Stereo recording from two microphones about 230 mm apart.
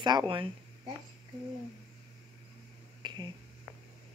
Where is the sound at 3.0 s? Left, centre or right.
Centre.